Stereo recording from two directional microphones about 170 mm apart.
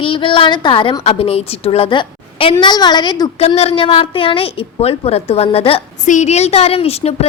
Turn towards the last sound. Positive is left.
turn(degrees=35)  # may be behind; listen again after turning